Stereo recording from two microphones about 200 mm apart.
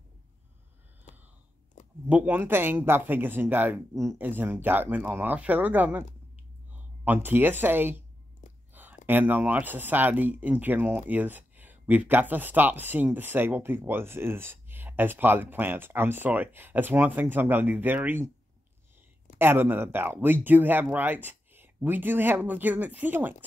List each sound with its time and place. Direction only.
1.1 s a sound: 35° left (ahead or behind)
2.0 s speech: 10° right (ahead or behind)
19.3 s speech: 10° right (ahead or behind)